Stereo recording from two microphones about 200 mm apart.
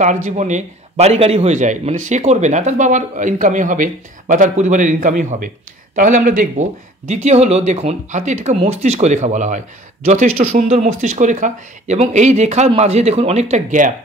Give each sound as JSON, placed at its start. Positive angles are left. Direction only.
{"t": 0.0, "sound": "a man's voice", "side_deg": -40}